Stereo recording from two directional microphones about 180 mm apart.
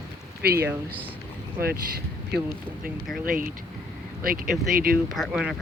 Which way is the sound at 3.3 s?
50° right (ahead or behind).